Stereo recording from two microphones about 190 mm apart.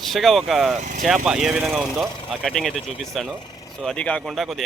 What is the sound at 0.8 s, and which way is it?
Speech, 40° right (ahead or behind).